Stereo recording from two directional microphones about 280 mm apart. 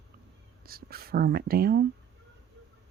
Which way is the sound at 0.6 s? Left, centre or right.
Right.